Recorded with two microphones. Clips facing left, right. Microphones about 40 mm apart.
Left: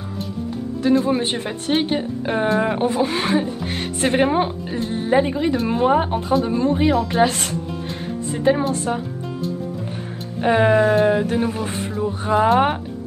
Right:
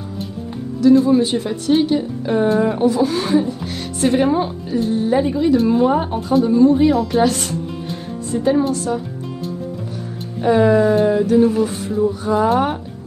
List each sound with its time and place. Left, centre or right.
1.0 s a woman's voice: left
10.4 s a woman's voice: left